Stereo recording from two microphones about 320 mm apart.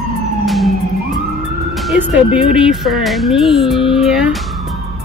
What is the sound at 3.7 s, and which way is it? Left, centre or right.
Speech, centre.